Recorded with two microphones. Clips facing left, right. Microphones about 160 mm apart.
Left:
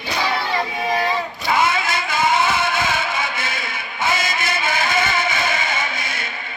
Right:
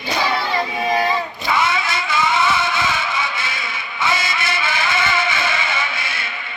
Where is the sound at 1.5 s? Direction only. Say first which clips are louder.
Left 1 dB; 50° left (ahead or behind).